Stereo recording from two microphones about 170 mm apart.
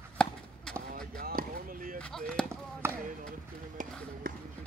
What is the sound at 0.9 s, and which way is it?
Basketball bounce, 55° right (ahead or behind).